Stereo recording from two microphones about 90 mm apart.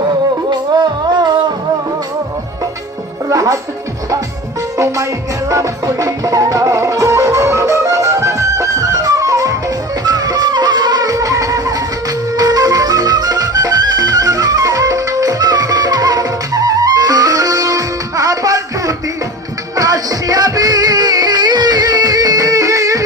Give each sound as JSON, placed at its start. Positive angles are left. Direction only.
{"t": 0.5, "sound": "music", "side_deg": -50}
{"t": 3.2, "sound": "music", "side_deg": -40}
{"t": 5.5, "sound": "music", "side_deg": -40}